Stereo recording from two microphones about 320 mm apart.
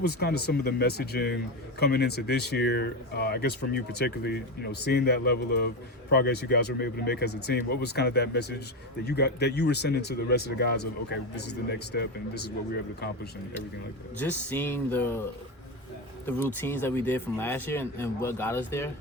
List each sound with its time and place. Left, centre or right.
0.0 s speech: left
14.2 s speech: centre
16.6 s speech: centre